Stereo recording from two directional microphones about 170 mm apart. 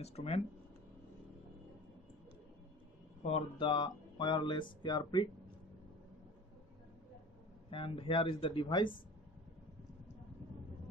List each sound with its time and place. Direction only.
0.0 s speech: 35° left (ahead or behind)
3.2 s speech: 40° left (ahead or behind)
7.7 s speech: 30° left (ahead or behind)